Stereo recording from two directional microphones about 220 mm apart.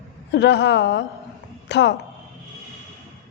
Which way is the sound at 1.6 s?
55° left (ahead or behind).